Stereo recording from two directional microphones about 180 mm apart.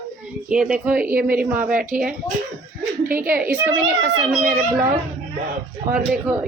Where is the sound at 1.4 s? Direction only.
5° right (ahead or behind).